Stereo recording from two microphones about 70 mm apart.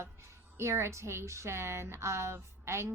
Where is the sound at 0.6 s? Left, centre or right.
Right.